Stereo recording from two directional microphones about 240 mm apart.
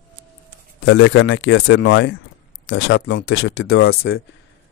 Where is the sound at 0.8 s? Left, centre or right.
Left.